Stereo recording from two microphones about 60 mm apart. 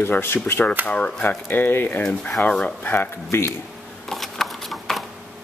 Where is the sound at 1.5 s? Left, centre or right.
Left.